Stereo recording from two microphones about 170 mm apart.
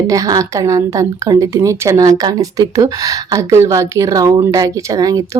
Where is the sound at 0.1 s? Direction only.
20° right (ahead or behind).